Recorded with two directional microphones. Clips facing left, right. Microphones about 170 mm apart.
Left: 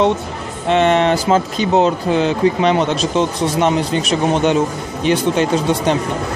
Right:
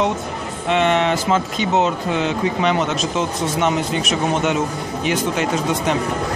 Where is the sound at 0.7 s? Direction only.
35° left (ahead or behind).